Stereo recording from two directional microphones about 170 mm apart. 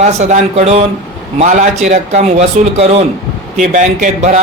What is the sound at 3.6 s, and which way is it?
Speech, 50° right (ahead or behind).